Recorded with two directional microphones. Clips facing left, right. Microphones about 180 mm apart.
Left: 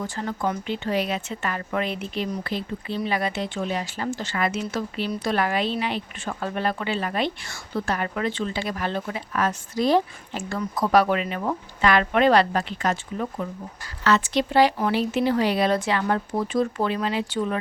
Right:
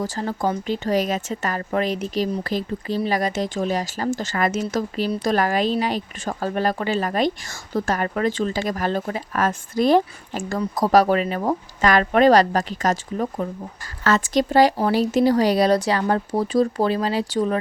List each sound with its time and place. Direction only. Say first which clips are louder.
0.0 s speech: right 3 dB; 35° right (ahead or behind); by 10.6 s 50° right (ahead or behind)
10.6 s speech: right 3 dB; 40° right (ahead or behind)